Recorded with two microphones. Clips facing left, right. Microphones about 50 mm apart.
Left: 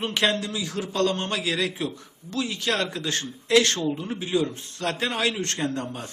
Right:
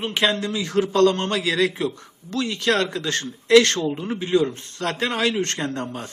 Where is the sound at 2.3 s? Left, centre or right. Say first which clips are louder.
Right 5 dB; right.